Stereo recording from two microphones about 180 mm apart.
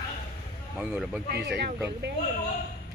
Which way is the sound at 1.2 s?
65° right (ahead or behind).